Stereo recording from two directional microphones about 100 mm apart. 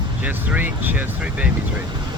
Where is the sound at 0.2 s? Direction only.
15° right (ahead or behind).